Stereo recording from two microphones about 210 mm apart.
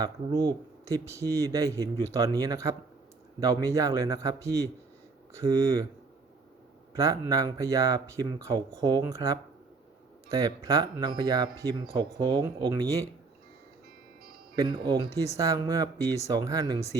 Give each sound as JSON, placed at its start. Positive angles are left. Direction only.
{"t": 0.9, "sound": "speech", "side_deg": -15}
{"t": 6.9, "sound": "speech", "side_deg": -15}
{"t": 14.5, "sound": "speech", "side_deg": -20}